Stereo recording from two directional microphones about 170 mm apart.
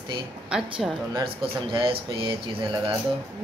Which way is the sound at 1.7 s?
30° right (ahead or behind).